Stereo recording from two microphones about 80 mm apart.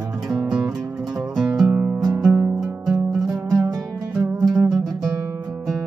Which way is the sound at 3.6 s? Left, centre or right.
Right.